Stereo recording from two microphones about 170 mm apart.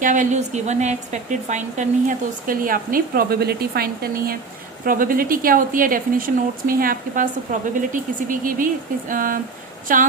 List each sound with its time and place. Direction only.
0.0 s speech: 50° right (ahead or behind)